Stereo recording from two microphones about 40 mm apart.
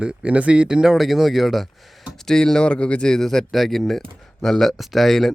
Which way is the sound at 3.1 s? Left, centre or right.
Centre.